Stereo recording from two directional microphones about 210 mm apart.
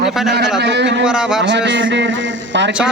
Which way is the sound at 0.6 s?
55° right (ahead or behind).